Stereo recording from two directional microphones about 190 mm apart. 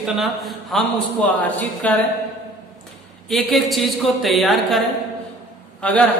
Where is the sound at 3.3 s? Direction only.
Centre (ahead or behind).